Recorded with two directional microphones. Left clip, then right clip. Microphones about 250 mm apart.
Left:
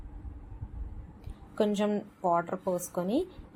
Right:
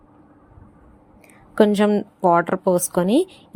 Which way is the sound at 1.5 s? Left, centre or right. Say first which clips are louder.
Right 12 dB; right.